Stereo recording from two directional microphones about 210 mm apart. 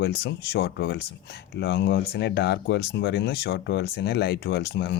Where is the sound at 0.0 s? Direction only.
55° left (ahead or behind).